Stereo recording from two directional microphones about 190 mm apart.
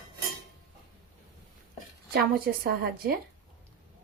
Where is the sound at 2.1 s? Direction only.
50° right (ahead or behind).